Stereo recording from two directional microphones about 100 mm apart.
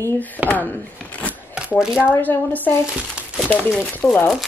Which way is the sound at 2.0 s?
20° left (ahead or behind).